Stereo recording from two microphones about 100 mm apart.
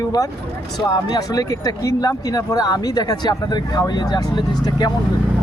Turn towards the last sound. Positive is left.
turn(degrees=40)  # may be behind; listen again after turning